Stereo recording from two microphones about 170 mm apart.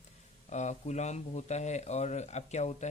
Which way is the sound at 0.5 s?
45° left (ahead or behind).